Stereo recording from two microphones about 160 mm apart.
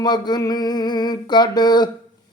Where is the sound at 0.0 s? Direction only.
25° left (ahead or behind).